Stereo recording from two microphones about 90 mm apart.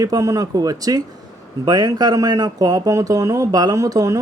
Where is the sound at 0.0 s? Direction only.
40° right (ahead or behind).